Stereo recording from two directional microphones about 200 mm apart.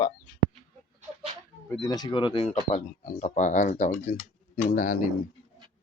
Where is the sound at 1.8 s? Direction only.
20° left (ahead or behind); by 4.9 s 40° left (ahead or behind).